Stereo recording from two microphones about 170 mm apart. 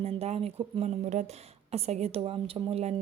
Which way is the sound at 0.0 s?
35° right (ahead or behind).